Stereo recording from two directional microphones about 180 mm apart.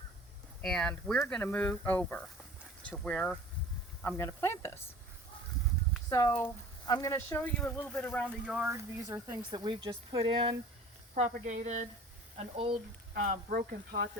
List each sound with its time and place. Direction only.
0.6 s speech: centre (ahead or behind)
6.1 s speech: 15° left (ahead or behind)
8.3 s speech: 10° right (ahead or behind); by 10.5 s 30° right (ahead or behind)
11.1 s speech: 45° right (ahead or behind)
13.2 s speech: 45° right (ahead or behind)